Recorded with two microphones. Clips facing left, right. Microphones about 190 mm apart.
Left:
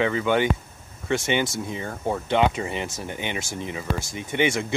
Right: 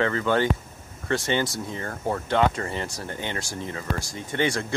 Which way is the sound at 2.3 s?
15° left (ahead or behind).